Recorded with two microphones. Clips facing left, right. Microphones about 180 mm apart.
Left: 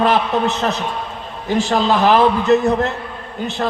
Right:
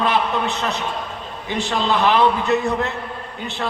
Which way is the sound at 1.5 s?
40° left (ahead or behind).